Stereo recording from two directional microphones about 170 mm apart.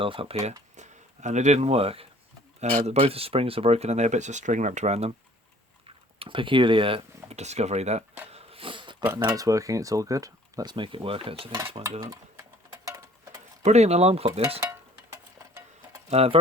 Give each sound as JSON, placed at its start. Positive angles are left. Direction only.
{"t": 0.0, "sound": "speech", "side_deg": -30}
{"t": 6.1, "sound": "speech", "side_deg": -30}
{"t": 8.3, "sound": "dog", "side_deg": -30}
{"t": 9.1, "sound": "speech", "side_deg": -20}
{"t": 12.1, "sound": "a sound", "side_deg": -20}
{"t": 13.6, "sound": "speech", "side_deg": -40}
{"t": 16.0, "sound": "speech", "side_deg": -35}